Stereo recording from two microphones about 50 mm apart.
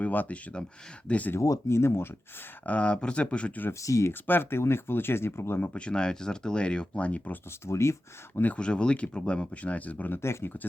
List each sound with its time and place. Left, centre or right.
0.0 s speech: left
1.4 s speech: left
2.6 s speech: left
3.7 s speech: left
4.1 s speech: left
5.7 s speech: centre
7.6 s speech: left
8.5 s speech: centre
10.2 s speech: left